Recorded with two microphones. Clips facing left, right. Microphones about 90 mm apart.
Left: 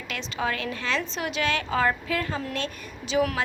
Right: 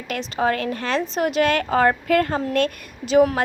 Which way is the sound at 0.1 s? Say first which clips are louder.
Right 7 dB; 45° right (ahead or behind).